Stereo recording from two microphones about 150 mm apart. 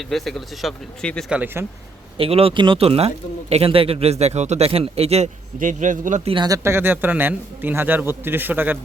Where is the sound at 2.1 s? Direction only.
40° right (ahead or behind).